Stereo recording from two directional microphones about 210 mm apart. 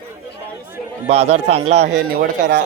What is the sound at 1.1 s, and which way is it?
Speech, 30° right (ahead or behind).